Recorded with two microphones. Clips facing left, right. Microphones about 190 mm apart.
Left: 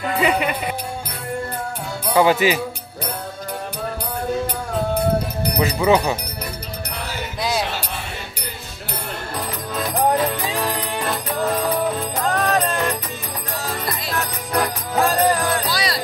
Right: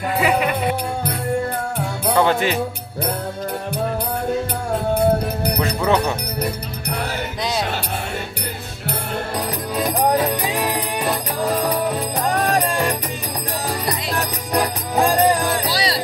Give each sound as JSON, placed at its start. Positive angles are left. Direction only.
{"t": 0.2, "sound": "speech", "side_deg": 0}
{"t": 2.1, "sound": "speech", "side_deg": 5}
{"t": 5.6, "sound": "speech", "side_deg": 5}
{"t": 9.8, "sound": "music", "side_deg": -15}
{"t": 14.5, "sound": "music", "side_deg": -15}
{"t": 15.6, "sound": "music", "side_deg": -30}